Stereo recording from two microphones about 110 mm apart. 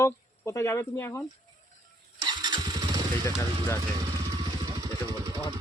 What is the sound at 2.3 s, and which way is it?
Motorcycle, 40° right (ahead or behind).